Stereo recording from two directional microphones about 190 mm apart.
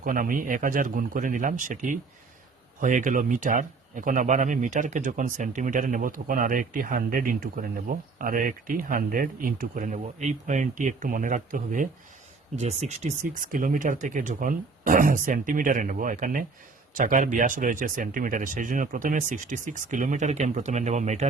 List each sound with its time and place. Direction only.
0.0 s speech: 45° right (ahead or behind)